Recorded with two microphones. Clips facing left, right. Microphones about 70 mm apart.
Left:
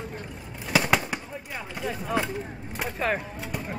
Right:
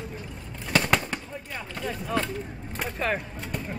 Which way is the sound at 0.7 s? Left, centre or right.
Centre.